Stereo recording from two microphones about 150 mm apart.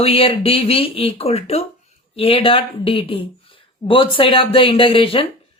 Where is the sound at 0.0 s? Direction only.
40° left (ahead or behind).